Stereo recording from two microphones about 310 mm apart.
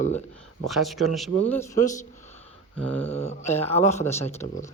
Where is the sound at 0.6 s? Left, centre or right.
Centre.